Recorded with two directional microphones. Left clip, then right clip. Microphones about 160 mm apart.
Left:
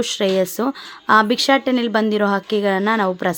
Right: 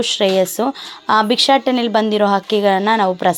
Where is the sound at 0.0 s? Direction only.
20° left (ahead or behind).